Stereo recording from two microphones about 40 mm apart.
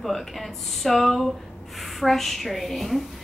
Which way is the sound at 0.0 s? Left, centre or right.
Centre.